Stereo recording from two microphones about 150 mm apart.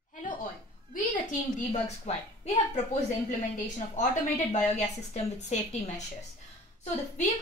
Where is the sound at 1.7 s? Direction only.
45° left (ahead or behind).